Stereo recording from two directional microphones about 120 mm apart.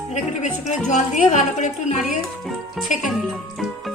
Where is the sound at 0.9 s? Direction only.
90° left.